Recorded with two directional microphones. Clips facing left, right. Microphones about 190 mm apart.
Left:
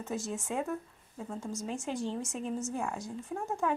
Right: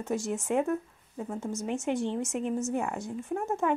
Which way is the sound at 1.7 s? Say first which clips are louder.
Right 6 dB; 20° right (ahead or behind).